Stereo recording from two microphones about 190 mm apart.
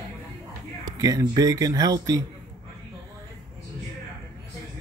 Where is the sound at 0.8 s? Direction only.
20° right (ahead or behind).